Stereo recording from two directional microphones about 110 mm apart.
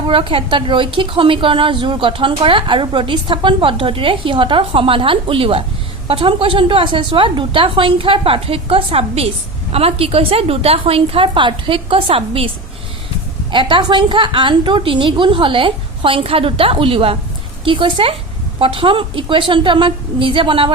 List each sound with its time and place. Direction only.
0.1 s a woman's voice: 55° right (ahead or behind)
13.5 s a woman's voice: 50° right (ahead or behind)